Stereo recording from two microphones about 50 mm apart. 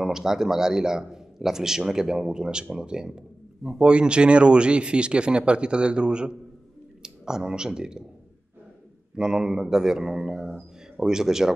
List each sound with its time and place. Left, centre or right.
0.0 s a man's voice: centre
9.1 s a man's voice: centre